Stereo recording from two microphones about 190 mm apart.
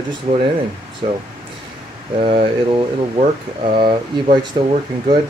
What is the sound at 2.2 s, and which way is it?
Speech, 30° right (ahead or behind).